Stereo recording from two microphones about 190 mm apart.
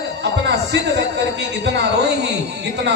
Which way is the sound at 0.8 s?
65° right (ahead or behind).